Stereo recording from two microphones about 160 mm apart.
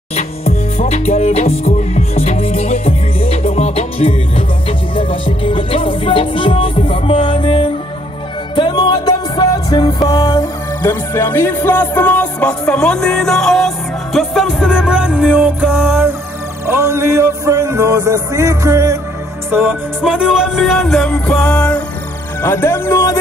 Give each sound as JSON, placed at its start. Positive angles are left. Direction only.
{"t": 0.7, "sound": "music", "side_deg": 45}
{"t": 19.5, "sound": "music", "side_deg": -10}
{"t": 22.4, "sound": "speech", "side_deg": 15}